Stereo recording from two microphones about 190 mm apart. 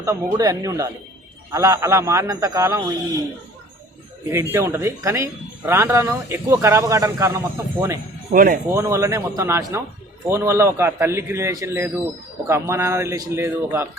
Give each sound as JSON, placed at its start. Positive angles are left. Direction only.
{"t": 0.0, "sound": "speech", "side_deg": -20}
{"t": 4.3, "sound": "speech", "side_deg": -15}
{"t": 8.3, "sound": "speech", "side_deg": -45}
{"t": 8.7, "sound": "speech", "side_deg": -15}